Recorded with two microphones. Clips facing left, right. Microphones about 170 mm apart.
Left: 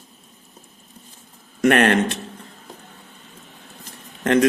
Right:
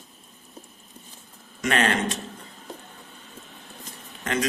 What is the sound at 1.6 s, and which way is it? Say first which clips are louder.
Speech: left 8 dB; 55° left (ahead or behind).